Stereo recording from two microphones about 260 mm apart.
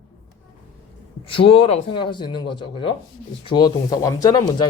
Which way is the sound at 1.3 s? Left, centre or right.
Left.